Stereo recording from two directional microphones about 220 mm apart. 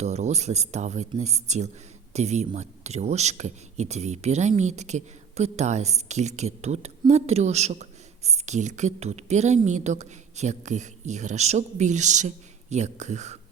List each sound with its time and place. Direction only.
0.0 s speech: 30° right (ahead or behind)